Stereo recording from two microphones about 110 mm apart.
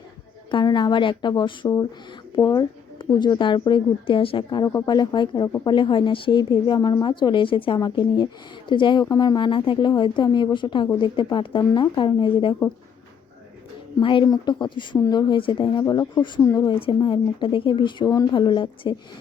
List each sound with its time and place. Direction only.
0.5 s speech: 45° left (ahead or behind)
4.6 s speech: 35° left (ahead or behind)
9.0 s speech: 35° left (ahead or behind)
14.0 s speech: 50° left (ahead or behind)
15.8 s speech: 35° left (ahead or behind)
16.8 s speech: 45° left (ahead or behind)